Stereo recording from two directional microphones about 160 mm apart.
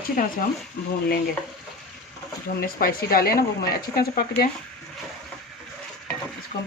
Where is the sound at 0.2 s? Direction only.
55° left (ahead or behind).